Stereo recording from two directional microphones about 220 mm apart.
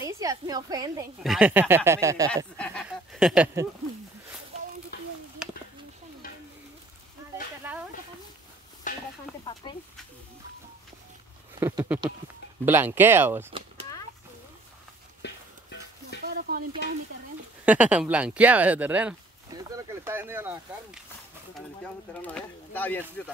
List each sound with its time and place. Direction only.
0.0 s a woman's voice: 15° right (ahead or behind)
1.2 s speech: 5° right (ahead or behind)
2.3 s speech: 5° left (ahead or behind)
4.9 s a sound: 45° left (ahead or behind)
5.4 s a sound: 5° right (ahead or behind)
6.2 s stir: 40° left (ahead or behind)
7.7 s snake: 5° right (ahead or behind)
8.9 s a sound: 35° left (ahead or behind)
11.6 s speech: 10° right (ahead or behind)
15.2 s a sound: 50° left (ahead or behind)
16.3 s stir: 45° right (ahead or behind)
17.6 s speech: 5° right (ahead or behind)
21.5 s speech: 5° left (ahead or behind)